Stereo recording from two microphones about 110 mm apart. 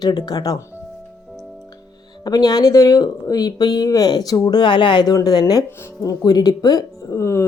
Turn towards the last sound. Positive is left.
turn(degrees=25)  # may be behind; listen again after turning